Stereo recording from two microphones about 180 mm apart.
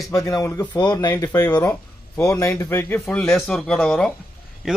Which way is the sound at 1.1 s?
10° left (ahead or behind).